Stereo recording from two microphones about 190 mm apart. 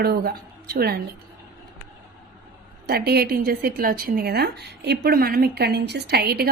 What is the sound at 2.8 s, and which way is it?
A woman's voice, 55° right (ahead or behind).